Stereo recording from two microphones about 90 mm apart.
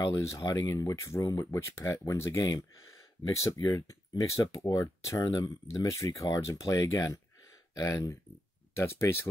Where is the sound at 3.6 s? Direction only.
40° left (ahead or behind).